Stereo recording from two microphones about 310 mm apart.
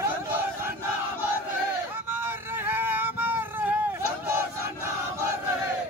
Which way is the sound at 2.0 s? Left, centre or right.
Centre.